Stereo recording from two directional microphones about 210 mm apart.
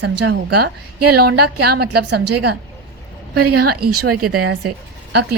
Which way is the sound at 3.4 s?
90° right.